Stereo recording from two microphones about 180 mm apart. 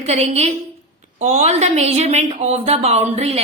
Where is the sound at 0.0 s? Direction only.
35° right (ahead or behind).